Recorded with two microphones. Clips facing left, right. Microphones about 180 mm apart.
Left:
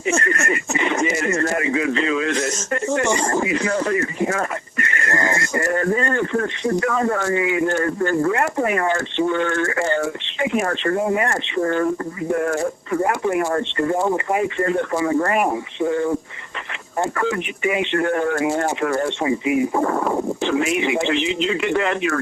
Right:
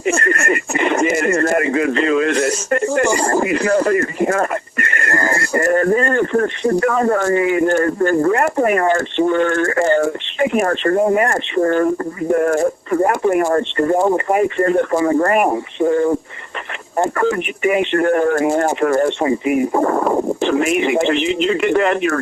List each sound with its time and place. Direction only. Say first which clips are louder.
0.2 s speech: right 4 dB; 50° right (ahead or behind)